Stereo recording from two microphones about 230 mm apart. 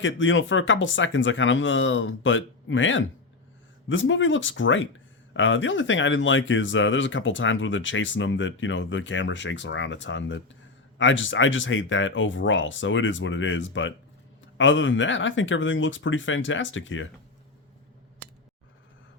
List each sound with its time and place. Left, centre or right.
0.0 s speech: left